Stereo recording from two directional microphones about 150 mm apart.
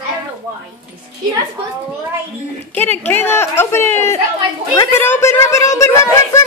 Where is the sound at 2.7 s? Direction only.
15° left (ahead or behind).